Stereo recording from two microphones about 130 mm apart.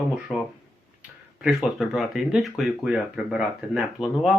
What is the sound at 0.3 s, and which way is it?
Speech, 15° left (ahead or behind).